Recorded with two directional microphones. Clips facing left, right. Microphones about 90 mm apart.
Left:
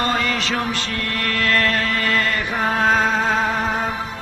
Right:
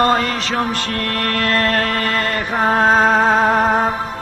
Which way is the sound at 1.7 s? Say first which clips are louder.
Right 2 dB; 50° right (ahead or behind).